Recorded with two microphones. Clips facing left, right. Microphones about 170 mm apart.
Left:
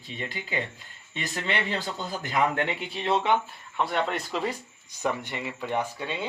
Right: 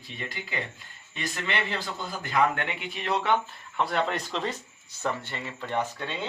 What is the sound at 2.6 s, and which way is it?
Speech, 30° left (ahead or behind).